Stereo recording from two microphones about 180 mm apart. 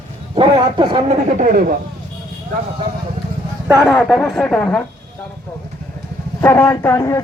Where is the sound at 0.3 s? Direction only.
30° right (ahead or behind).